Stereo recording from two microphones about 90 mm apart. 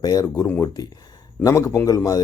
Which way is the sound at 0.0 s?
45° left (ahead or behind).